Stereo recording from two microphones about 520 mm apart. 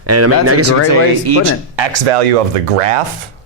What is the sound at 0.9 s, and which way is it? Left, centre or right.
Speech, right.